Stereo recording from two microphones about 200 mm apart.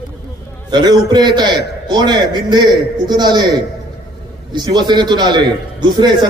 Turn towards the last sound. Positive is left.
turn(degrees=-20)  # may be behind; listen again after turning